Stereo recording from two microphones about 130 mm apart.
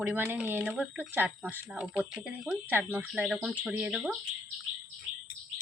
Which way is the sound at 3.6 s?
10° right (ahead or behind).